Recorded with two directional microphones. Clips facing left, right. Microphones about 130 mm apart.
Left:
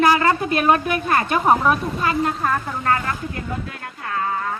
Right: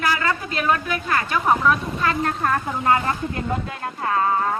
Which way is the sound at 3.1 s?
25° right (ahead or behind).